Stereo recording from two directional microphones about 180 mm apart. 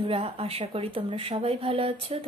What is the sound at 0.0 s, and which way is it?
Speech, 30° right (ahead or behind).